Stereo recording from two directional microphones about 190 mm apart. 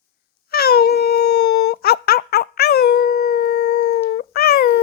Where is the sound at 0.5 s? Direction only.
55° left (ahead or behind).